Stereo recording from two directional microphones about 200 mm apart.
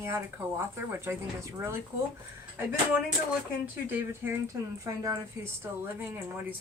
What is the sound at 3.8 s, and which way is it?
Speech, 10° right (ahead or behind).